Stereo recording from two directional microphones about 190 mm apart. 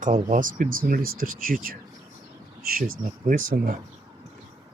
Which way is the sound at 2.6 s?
50° right (ahead or behind).